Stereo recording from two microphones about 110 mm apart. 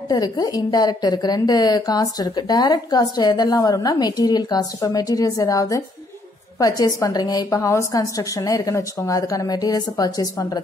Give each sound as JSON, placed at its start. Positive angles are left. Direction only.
{"t": 0.1, "sound": "a woman's voice", "side_deg": 35}